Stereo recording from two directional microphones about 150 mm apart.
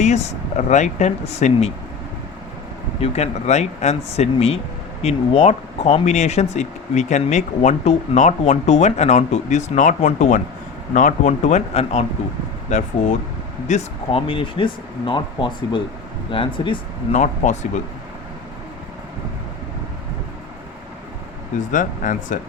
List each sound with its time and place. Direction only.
0.0 s speech: 50° left (ahead or behind)
3.0 s speech: 45° left (ahead or behind)
17.1 s speech: 50° left (ahead or behind)
21.6 s speech: 60° left (ahead or behind)